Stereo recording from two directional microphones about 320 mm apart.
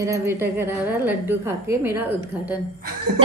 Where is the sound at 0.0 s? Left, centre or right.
Centre.